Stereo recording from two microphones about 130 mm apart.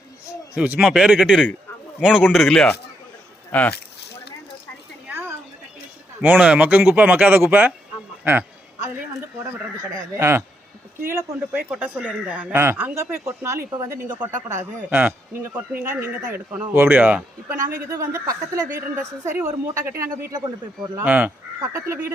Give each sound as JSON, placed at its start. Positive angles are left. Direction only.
{"t": 0.5, "sound": "speech", "side_deg": -10}
{"t": 3.5, "sound": "speech", "side_deg": 10}
{"t": 5.0, "sound": "a sound", "side_deg": -15}
{"t": 6.2, "sound": "speech", "side_deg": -10}
{"t": 8.2, "sound": "a sound", "side_deg": -15}
{"t": 10.2, "sound": "speech", "side_deg": -20}
{"t": 17.8, "sound": "speech", "side_deg": -25}
{"t": 21.0, "sound": "speech", "side_deg": -10}
{"t": 21.6, "sound": "speech", "side_deg": -25}